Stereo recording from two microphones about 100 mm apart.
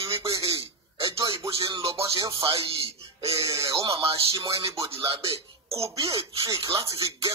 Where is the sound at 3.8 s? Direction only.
65° right (ahead or behind).